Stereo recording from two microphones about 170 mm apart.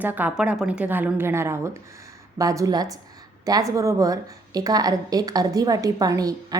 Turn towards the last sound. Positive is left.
turn(degrees=-20)  # may be behind; listen again after turning